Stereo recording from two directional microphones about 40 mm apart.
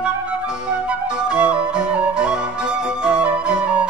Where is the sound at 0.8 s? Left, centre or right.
Right.